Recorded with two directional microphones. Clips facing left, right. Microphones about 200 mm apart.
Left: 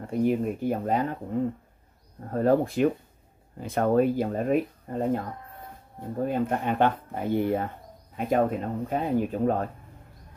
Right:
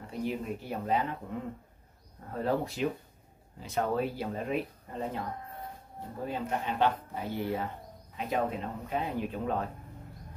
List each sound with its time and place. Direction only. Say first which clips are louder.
0.0 s speech: left 10 dB; 50° left (ahead or behind)
6.2 s speech: left 7 dB; 50° left (ahead or behind)